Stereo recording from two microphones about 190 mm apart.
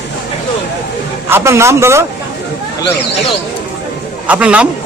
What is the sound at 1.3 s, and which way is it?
Speech, 15° right (ahead or behind).